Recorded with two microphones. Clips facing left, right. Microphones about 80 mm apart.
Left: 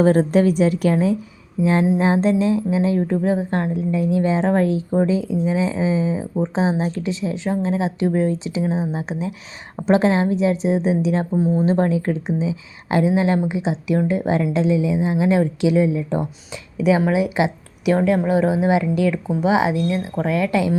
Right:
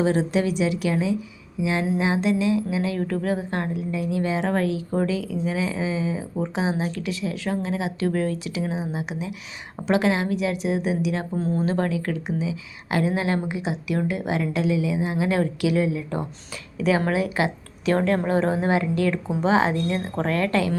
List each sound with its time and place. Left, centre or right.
0.0 s a woman's voice: left
11.3 s a woman's voice: centre